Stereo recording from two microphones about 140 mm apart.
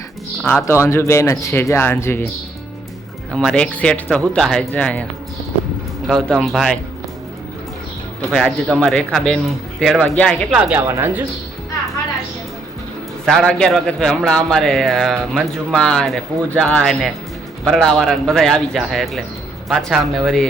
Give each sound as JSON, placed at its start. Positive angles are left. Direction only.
{"t": 0.4, "sound": "speech", "side_deg": 15}
{"t": 3.3, "sound": "speech", "side_deg": 5}
{"t": 6.1, "sound": "a man's voice", "side_deg": 5}
{"t": 8.3, "sound": "a man's voice", "side_deg": 5}
{"t": 10.5, "sound": "speech", "side_deg": -10}
{"t": 13.2, "sound": "a man's voice", "side_deg": 5}